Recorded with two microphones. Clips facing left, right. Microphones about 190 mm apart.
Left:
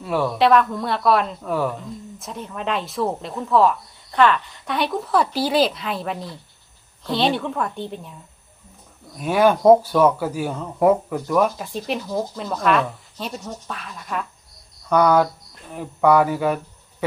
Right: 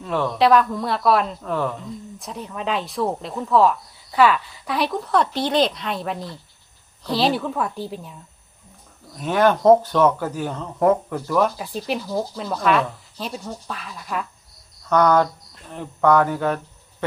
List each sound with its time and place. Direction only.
0.0 s speech: 10° left (ahead or behind)
9.1 s speech: 10° left (ahead or behind)
14.8 s cricket: 10° left (ahead or behind)
15.7 s speech: 10° left (ahead or behind)